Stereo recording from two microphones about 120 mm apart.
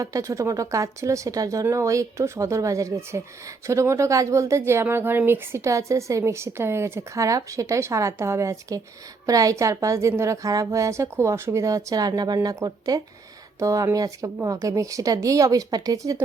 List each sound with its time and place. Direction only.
0.0 s speech: 25° right (ahead or behind)